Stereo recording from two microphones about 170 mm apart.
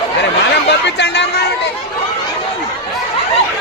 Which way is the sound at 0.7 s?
85° left.